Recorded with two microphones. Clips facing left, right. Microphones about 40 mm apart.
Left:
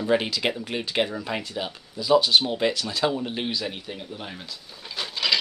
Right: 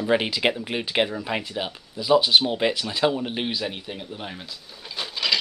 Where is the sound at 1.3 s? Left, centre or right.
Centre.